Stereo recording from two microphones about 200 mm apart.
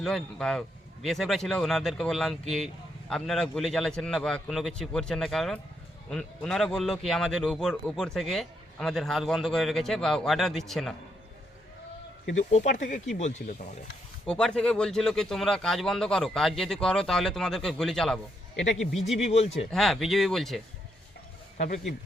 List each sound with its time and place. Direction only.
0.0 s speech: centre (ahead or behind)
12.5 s speech: 35° left (ahead or behind)
14.3 s speech: 5° left (ahead or behind)
19.2 s speech: 30° left (ahead or behind)
19.7 s speech: centre (ahead or behind)